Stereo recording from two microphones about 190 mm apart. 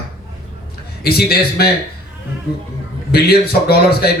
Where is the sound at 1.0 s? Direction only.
55° left (ahead or behind).